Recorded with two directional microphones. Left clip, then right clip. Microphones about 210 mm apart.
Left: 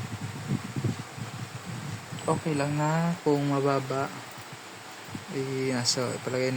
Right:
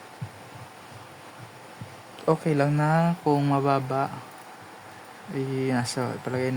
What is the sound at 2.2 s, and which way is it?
Speech, 45° right (ahead or behind).